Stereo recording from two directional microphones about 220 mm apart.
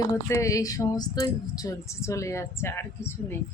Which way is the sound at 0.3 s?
15° left (ahead or behind).